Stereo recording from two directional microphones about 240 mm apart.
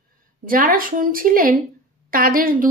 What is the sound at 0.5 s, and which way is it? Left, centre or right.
A woman's voice, right.